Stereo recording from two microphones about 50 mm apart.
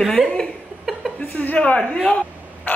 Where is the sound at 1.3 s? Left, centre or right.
Left.